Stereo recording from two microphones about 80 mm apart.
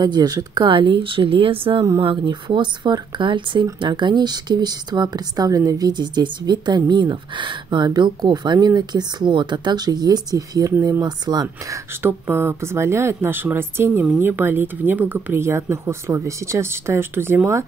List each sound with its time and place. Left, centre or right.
0.0 s speech: right
0.7 s speech: right
3.8 s speech: right
12.1 s a woman's voice: right